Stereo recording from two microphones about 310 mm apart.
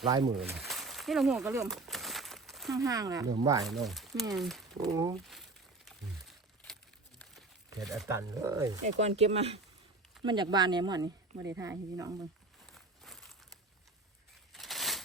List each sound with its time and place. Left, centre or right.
0.0 s a woman's voice: centre
0.3 s a sound: centre
2.7 s a woman's voice: centre
3.8 s speech: centre
4.8 s a woman's voice: centre
5.1 s crumpling: centre
7.8 s a woman's voice: centre
9.0 s a woman's voice: right
12.7 s crumpling: centre
14.5 s a sound: centre